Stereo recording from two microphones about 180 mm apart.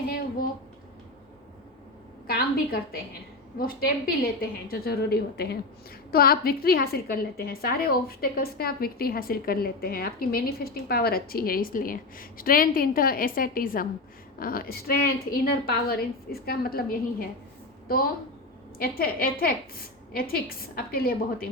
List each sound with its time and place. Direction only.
2.2 s a woman's voice: 60° left (ahead or behind)